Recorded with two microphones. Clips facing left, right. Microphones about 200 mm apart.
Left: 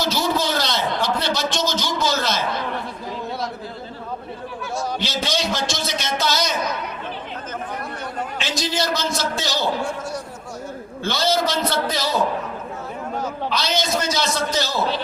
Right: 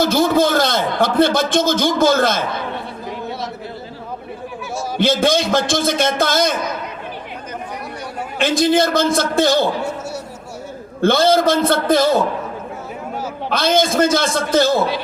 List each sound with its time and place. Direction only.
0.0 s a man's voice: 50° right (ahead or behind)
4.9 s a man's voice: 50° right (ahead or behind)
8.4 s a man's voice: 55° right (ahead or behind)
11.0 s a man's voice: 55° right (ahead or behind)
13.5 s a man's voice: 50° right (ahead or behind)